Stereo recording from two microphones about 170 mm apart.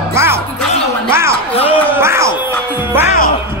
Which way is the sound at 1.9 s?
15° right (ahead or behind).